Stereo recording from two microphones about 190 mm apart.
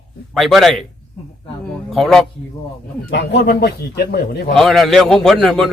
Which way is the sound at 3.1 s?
60° left (ahead or behind).